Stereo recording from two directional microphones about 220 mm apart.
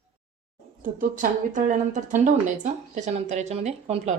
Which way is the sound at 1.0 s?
35° right (ahead or behind).